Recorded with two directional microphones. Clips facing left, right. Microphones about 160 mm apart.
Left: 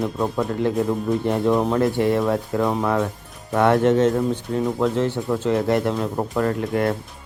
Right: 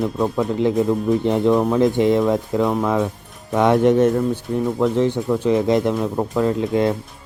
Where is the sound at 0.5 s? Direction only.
20° right (ahead or behind).